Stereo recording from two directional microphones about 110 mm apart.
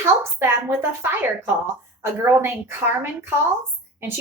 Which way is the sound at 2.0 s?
20° right (ahead or behind).